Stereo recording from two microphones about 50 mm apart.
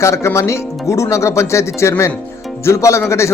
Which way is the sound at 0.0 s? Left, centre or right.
Left.